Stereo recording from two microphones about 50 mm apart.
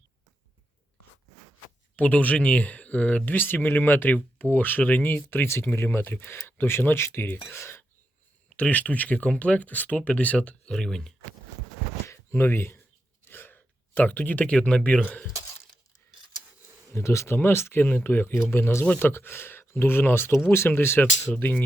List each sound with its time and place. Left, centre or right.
2.0 s speech: left
5.7 s speech: left
8.5 s speech: left
10.7 s speech: centre
12.0 s a sound: left
13.2 s gasp: left
14.5 s speech: left
16.9 s speech: left
17.3 s speech: left
17.8 s speech: left
18.9 s speech: left
19.1 s speech: left